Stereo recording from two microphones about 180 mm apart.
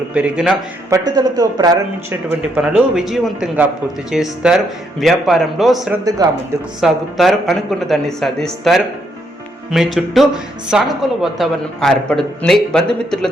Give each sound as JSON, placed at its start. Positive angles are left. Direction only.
{"t": 0.1, "sound": "a man's voice", "side_deg": -5}
{"t": 0.9, "sound": "speech", "side_deg": -20}
{"t": 2.6, "sound": "a man's voice", "side_deg": -5}
{"t": 5.9, "sound": "speech", "side_deg": -20}
{"t": 6.8, "sound": "a man's voice", "side_deg": 0}